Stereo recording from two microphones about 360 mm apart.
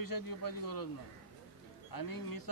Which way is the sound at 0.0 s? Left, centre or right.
Left.